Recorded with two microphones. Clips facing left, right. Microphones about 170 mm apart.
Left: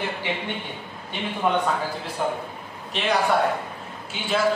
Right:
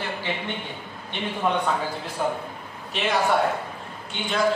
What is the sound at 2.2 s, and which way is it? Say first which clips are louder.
A man's voice: even; centre (ahead or behind).